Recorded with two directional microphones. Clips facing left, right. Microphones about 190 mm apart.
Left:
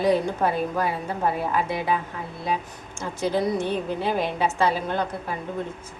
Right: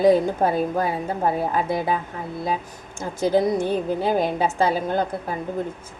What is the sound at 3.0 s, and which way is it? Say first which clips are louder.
A woman's voice: right 4 dB; 45° right (ahead or behind).